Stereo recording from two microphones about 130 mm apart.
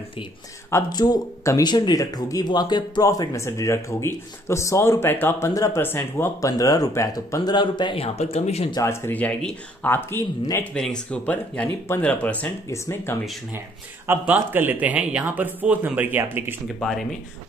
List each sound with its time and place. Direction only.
0.9 s speech: 30° left (ahead or behind)
7.5 s a man's voice: 35° left (ahead or behind); by 8.6 s 55° left (ahead or behind)
8.8 s speech: 20° left (ahead or behind)
12.6 s speech: 20° left (ahead or behind)
14.0 s speech: 15° right (ahead or behind)
16.6 s speech: centre (ahead or behind)